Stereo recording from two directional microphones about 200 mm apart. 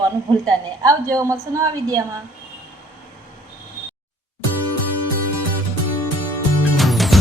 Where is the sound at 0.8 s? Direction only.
15° right (ahead or behind).